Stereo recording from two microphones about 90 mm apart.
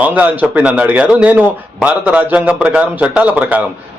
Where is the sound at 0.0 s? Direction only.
15° right (ahead or behind).